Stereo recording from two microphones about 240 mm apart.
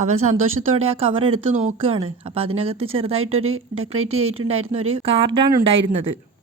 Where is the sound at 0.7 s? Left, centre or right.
Right.